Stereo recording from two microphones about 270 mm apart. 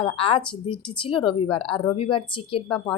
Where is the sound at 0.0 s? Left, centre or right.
Left.